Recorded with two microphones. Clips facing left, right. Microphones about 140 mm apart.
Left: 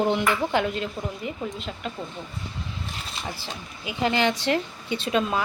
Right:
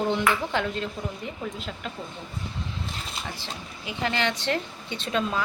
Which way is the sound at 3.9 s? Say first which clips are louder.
Left 4 dB; 10° left (ahead or behind).